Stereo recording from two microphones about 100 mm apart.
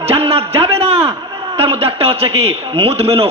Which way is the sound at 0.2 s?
70° right (ahead or behind).